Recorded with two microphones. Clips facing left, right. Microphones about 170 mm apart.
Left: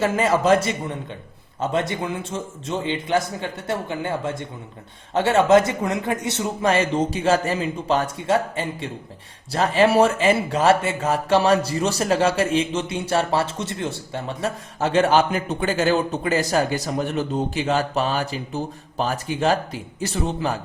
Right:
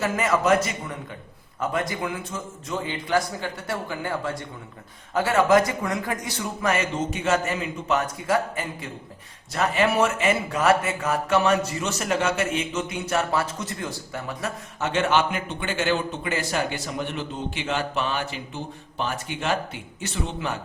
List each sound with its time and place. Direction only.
0.0 s a man's voice: 30° left (ahead or behind)